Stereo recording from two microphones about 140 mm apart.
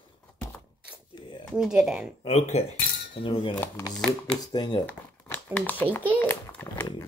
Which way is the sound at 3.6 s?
5° left (ahead or behind).